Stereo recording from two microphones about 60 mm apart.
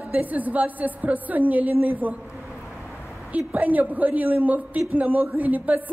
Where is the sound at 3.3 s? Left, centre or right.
Right.